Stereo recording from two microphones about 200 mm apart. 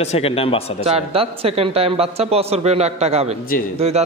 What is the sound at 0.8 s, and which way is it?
A man's voice, 30° right (ahead or behind).